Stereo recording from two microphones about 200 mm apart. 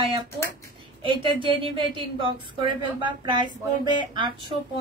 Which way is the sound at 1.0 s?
25° right (ahead or behind).